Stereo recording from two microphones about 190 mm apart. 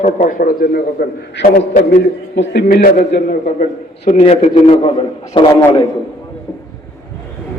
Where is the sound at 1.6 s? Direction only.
45° left (ahead or behind).